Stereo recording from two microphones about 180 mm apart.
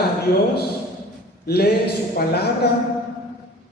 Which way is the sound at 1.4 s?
60° left (ahead or behind).